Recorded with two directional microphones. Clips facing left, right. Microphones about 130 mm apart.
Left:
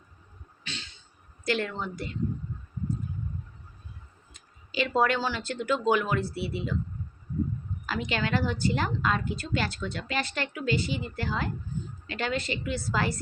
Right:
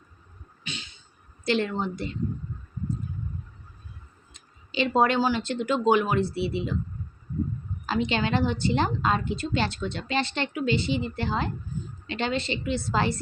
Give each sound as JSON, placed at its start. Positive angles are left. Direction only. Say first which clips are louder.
{"t": 0.6, "sound": "a sound", "louder": "right 3 dB", "side_deg": -15}
{"t": 1.5, "sound": "a woman's voice", "louder": "right 4 dB", "side_deg": -25}
{"t": 4.4, "sound": "a woman's voice", "louder": "right 3 dB", "side_deg": -25}
{"t": 7.9, "sound": "a woman's voice", "louder": "right 4 dB", "side_deg": -25}